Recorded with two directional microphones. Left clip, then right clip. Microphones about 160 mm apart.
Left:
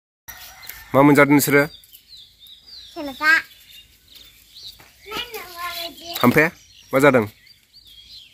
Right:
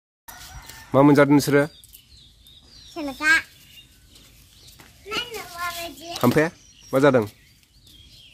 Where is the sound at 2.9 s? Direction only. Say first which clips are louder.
Left 2 dB; 45° right (ahead or behind).